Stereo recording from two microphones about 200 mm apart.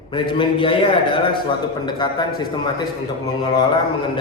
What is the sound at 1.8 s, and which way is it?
Speech, 20° left (ahead or behind).